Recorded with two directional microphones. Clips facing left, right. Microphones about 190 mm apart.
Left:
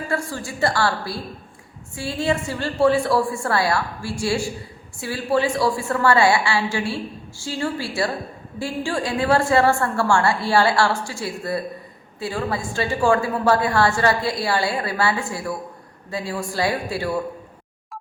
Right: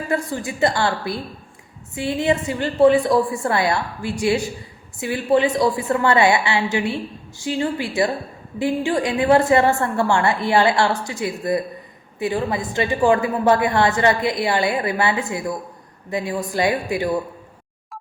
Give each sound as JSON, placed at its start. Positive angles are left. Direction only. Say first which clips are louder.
{"t": 0.1, "sound": "a woman's voice", "louder": "right 4 dB", "side_deg": -20}